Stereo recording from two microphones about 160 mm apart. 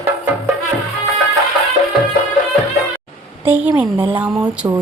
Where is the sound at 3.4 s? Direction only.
10° right (ahead or behind).